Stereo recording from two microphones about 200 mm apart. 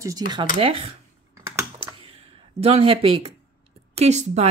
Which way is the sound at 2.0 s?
30° right (ahead or behind).